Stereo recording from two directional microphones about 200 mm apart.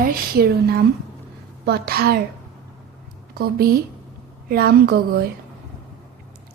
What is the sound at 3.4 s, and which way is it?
Speech, 50° right (ahead or behind).